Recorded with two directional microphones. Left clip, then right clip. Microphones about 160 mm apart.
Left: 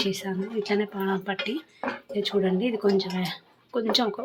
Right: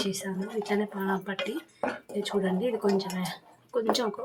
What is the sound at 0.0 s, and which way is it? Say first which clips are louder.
Speech: left 4 dB; 15° left (ahead or behind).